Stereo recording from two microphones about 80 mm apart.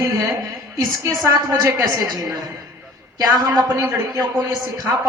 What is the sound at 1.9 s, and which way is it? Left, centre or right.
A woman's voice, right.